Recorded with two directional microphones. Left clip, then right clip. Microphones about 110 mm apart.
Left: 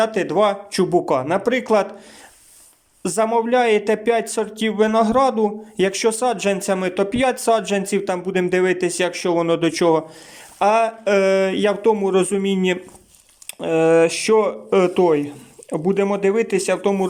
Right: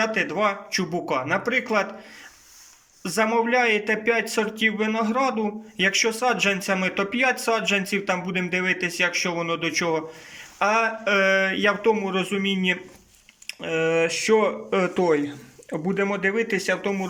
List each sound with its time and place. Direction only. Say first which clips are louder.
0.0 s speech: left 5 dB; 40° left (ahead or behind)
3.0 s speech: left 3 dB; 35° left (ahead or behind)